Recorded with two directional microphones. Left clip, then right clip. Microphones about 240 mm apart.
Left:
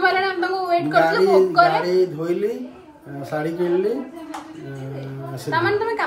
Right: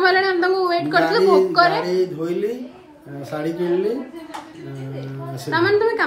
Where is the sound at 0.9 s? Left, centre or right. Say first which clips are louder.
Even; centre.